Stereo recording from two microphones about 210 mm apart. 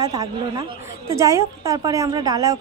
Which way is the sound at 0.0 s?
15° right (ahead or behind).